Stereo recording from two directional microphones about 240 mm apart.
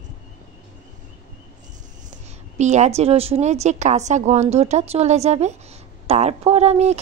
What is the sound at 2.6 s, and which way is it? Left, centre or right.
Speech, right.